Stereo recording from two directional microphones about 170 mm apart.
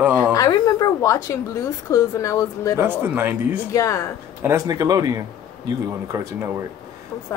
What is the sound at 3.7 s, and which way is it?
Speech, 20° left (ahead or behind).